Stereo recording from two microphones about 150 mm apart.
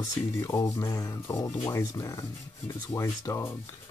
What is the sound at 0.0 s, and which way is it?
Speech, 20° left (ahead or behind).